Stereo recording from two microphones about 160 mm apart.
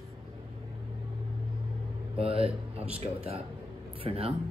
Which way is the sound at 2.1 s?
35° right (ahead or behind).